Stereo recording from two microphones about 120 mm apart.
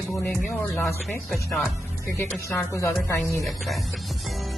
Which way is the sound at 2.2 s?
20° left (ahead or behind).